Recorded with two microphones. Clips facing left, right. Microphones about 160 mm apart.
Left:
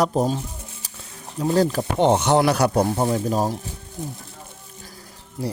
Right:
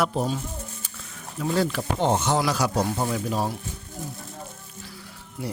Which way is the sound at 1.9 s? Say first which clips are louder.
Left 6 dB; 65° left (ahead or behind).